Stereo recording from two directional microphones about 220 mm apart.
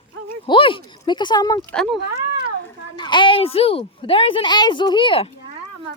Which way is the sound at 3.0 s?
20° left (ahead or behind).